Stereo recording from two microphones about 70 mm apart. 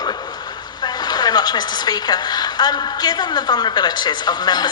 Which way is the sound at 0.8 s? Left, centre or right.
Left.